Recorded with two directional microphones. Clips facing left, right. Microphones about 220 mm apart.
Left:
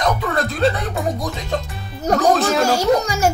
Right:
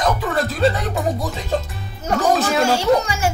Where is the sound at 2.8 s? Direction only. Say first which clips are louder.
Left 1 dB; 40° left (ahead or behind).